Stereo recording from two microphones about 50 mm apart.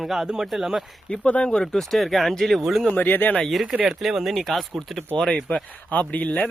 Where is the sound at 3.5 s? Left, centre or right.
Centre.